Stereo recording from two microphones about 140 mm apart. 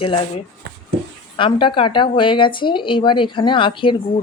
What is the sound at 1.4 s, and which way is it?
A woman's voice, 35° left (ahead or behind).